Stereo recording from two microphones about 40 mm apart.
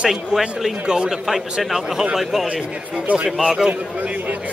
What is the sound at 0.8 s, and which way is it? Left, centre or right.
Speech, right.